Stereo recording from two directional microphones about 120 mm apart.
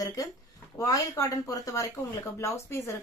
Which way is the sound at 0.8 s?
30° left (ahead or behind).